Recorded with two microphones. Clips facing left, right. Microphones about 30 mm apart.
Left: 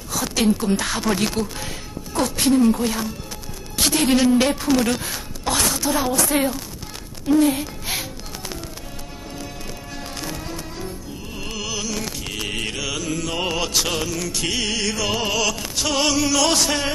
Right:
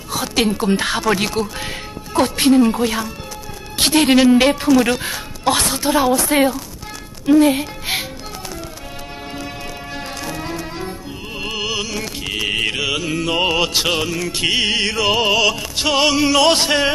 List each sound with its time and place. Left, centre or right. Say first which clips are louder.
0.1 s speech: right 2 dB; right
7.5 s music: right 5 dB; right
9.9 s music: right 4 dB; right